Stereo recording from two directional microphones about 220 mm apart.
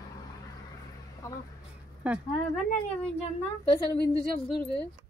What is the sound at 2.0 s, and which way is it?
Speech, 5° right (ahead or behind).